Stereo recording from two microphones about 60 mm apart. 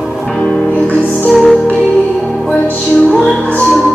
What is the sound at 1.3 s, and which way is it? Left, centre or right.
Music, centre.